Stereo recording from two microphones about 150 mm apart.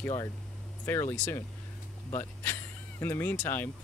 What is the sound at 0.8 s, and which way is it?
Speech, 15° left (ahead or behind).